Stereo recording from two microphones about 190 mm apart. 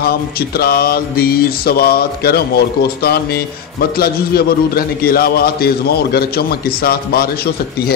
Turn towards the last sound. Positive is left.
turn(degrees=55)  # may be behind; listen again after turning